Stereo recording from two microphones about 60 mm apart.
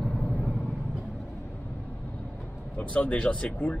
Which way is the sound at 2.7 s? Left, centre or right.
Left.